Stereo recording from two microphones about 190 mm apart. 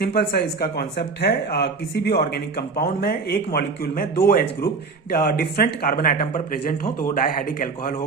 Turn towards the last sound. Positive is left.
turn(degrees=45)  # may be behind; listen again after turning